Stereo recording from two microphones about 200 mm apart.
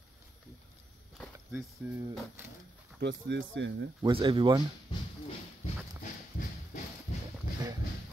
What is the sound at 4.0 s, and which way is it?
Speech, 25° right (ahead or behind).